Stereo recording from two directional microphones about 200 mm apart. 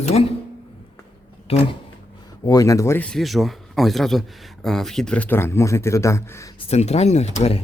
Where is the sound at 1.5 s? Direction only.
30° left (ahead or behind).